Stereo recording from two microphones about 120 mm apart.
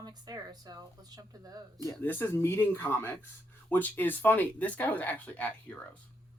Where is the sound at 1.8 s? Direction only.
20° left (ahead or behind).